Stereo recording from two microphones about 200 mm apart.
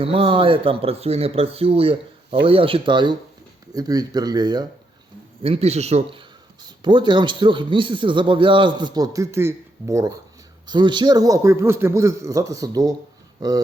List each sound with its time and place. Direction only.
0.0 s a man's voice: 30° right (ahead or behind)
5.4 s a man's voice: 30° right (ahead or behind)